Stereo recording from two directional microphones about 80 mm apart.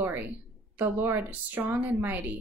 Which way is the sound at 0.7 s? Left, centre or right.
Right.